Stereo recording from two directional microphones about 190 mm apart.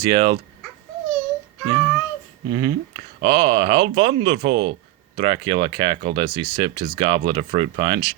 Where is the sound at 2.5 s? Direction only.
25° right (ahead or behind).